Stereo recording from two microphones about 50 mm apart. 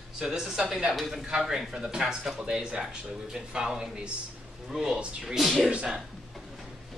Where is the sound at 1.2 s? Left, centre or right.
Centre.